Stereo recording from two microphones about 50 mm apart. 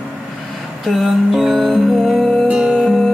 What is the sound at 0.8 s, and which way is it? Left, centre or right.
Music, centre.